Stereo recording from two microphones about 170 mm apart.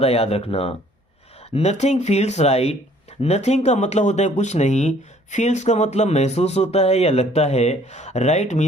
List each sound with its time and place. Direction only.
0.0 s speech: 35° left (ahead or behind)